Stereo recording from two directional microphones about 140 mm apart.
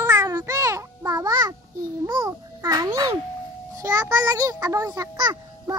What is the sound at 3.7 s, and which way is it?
A child's voice, 20° right (ahead or behind).